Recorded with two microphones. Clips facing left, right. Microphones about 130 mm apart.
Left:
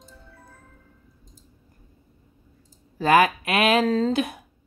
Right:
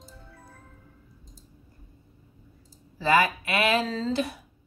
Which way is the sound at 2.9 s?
55° left (ahead or behind).